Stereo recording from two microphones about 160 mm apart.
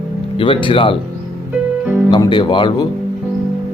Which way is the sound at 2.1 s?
30° left (ahead or behind).